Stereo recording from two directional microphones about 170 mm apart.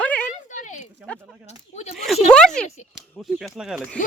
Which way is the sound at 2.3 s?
5° left (ahead or behind).